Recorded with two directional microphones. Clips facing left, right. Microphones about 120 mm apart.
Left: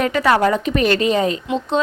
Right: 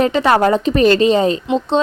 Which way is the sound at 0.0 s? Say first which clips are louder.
Right 3 dB; 25° right (ahead or behind).